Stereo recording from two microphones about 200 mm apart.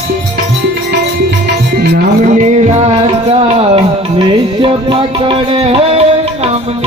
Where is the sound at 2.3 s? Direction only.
35° right (ahead or behind).